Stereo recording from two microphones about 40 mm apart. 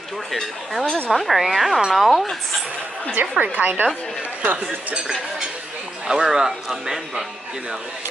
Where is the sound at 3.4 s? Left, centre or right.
Right.